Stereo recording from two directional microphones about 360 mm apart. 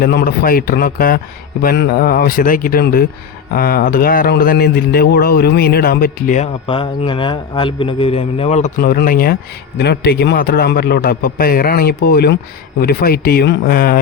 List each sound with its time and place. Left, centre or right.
0.0 s speech: left